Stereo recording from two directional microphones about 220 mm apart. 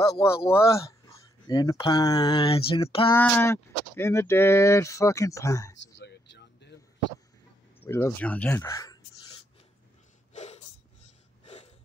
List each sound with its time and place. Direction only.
0.5 s speech: 15° left (ahead or behind)
3.1 s speech: 10° left (ahead or behind)
5.9 s a sound: 50° left (ahead or behind)
7.8 s speech: 10° left (ahead or behind)
10.3 s snort: 30° left (ahead or behind)